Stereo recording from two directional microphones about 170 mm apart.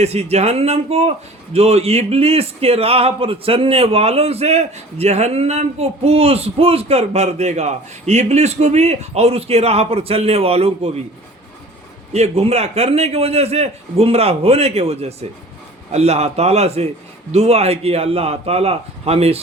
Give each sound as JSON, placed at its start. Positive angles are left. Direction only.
{"t": 0.0, "sound": "speech", "side_deg": -40}
{"t": 12.1, "sound": "speech", "side_deg": -40}